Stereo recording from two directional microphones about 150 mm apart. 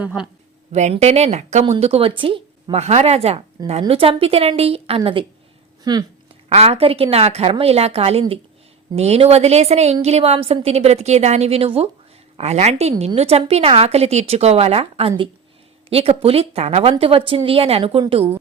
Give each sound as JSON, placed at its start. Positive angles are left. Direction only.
{"t": 0.0, "sound": "speech", "side_deg": -10}
{"t": 0.7, "sound": "a woman's voice", "side_deg": -50}
{"t": 5.8, "sound": "speech", "side_deg": -25}
{"t": 6.5, "sound": "a woman's voice", "side_deg": -40}